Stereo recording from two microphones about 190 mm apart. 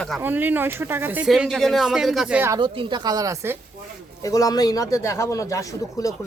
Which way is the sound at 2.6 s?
25° right (ahead or behind).